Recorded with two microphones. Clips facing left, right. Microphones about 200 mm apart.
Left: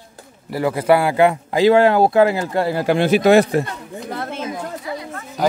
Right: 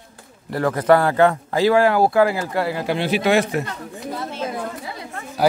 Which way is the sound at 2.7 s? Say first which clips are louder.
Left 5 dB; 45° left (ahead or behind).